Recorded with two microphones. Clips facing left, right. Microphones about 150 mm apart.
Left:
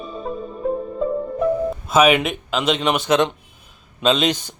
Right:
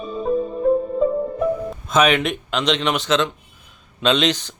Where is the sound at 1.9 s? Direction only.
5° left (ahead or behind).